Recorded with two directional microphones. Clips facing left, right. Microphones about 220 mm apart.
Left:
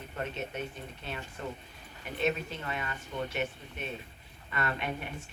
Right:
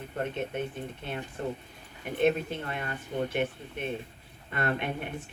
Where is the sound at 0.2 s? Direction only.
55° right (ahead or behind).